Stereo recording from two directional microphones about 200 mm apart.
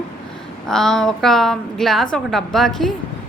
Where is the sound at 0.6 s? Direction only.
Centre (ahead or behind).